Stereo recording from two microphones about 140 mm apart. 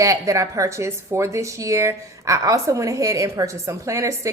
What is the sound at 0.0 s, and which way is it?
A woman's voice, 20° right (ahead or behind).